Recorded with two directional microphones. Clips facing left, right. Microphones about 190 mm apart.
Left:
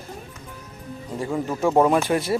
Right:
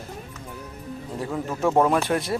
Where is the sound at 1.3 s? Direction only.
10° left (ahead or behind).